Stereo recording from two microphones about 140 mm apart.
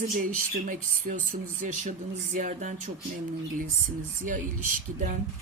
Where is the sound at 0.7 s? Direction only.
70° right (ahead or behind).